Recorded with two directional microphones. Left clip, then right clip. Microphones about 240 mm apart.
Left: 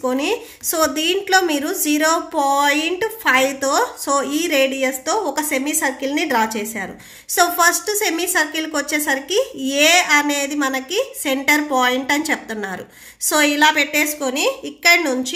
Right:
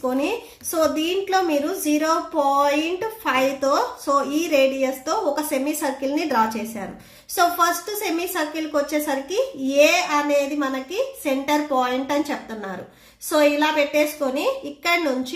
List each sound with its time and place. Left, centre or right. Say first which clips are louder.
0.0 s a woman's voice: left 3 dB; left